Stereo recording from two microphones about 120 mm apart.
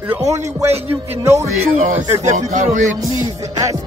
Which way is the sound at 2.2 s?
90° right.